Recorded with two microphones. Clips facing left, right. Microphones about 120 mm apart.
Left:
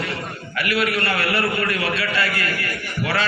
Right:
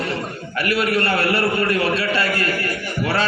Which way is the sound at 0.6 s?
35° right (ahead or behind).